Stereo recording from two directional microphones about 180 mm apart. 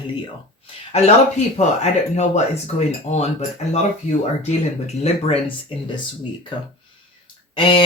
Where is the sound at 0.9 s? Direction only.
40° left (ahead or behind).